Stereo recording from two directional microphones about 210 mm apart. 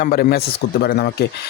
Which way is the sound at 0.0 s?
45° left (ahead or behind).